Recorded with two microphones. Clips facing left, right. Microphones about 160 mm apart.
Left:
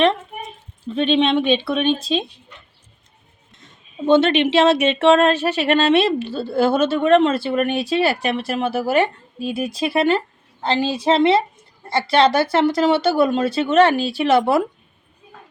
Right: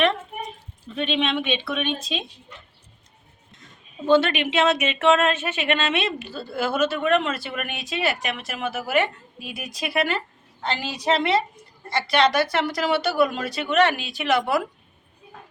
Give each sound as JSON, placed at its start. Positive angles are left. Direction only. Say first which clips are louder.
{"t": 0.9, "sound": "speech", "louder": "left 7 dB", "side_deg": 30}
{"t": 3.6, "sound": "speech", "louder": "left 7 dB", "side_deg": 25}